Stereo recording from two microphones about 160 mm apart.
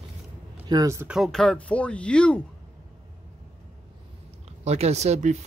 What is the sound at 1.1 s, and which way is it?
Speech, centre (ahead or behind).